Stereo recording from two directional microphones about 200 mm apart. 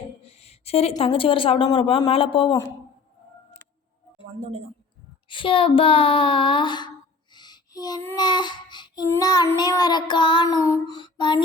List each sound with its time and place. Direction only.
0.3 s speech: 30° left (ahead or behind)
5.3 s speech: 25° left (ahead or behind)
7.3 s child singing: 20° left (ahead or behind)